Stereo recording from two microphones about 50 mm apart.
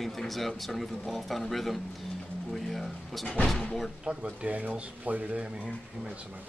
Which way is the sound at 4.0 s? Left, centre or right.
Centre.